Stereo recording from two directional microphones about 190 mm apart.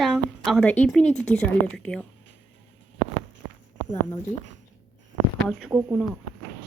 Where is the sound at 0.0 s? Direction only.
Centre (ahead or behind).